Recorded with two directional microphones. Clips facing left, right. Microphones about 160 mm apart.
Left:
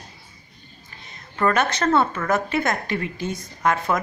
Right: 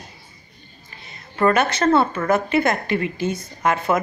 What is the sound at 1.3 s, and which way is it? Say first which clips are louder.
A woman's voice: right 3 dB; 5° right (ahead or behind).